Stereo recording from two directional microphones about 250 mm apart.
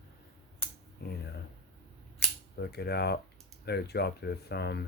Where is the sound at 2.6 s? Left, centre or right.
Left.